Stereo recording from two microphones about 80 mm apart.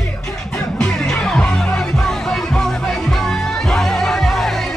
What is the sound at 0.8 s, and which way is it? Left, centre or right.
Music, centre.